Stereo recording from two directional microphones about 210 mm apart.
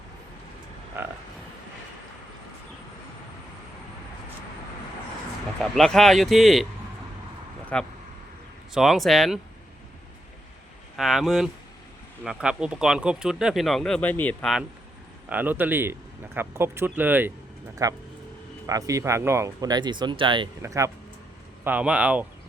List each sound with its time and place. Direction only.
1.0 s speech: 10° right (ahead or behind)
5.7 s speech: centre (ahead or behind)
7.7 s speech: 5° left (ahead or behind)
10.9 s speech: centre (ahead or behind)
15.3 s speech: 10° right (ahead or behind)